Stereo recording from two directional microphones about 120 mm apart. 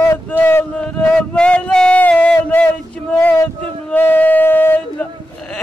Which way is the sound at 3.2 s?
25° left (ahead or behind).